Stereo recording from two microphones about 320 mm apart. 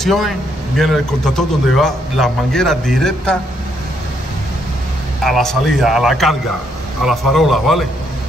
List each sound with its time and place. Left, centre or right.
0.0 s speech: centre
5.2 s speech: centre